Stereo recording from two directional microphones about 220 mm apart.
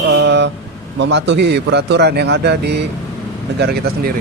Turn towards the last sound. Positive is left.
turn(degrees=-45)  # may be behind; listen again after turning